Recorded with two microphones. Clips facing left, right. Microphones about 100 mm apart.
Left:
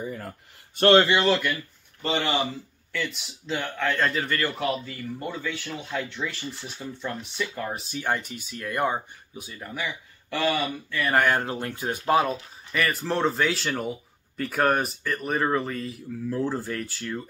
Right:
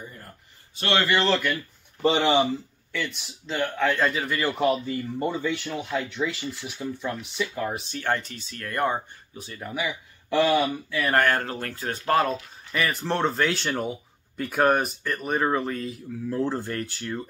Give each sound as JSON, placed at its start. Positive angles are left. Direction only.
{"t": 0.9, "sound": "speech", "side_deg": 20}
{"t": 1.2, "sound": "speech", "side_deg": 5}
{"t": 2.0, "sound": "speech", "side_deg": -15}
{"t": 2.9, "sound": "speech", "side_deg": 0}
{"t": 4.4, "sound": "speech", "side_deg": -20}
{"t": 7.9, "sound": "speech", "side_deg": 10}
{"t": 9.6, "sound": "speech", "side_deg": -5}
{"t": 11.1, "sound": "speech", "side_deg": 10}